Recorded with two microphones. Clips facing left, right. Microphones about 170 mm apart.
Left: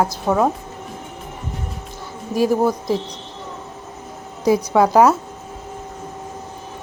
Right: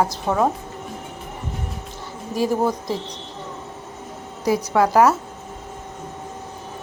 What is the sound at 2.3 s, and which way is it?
Speech, 15° left (ahead or behind).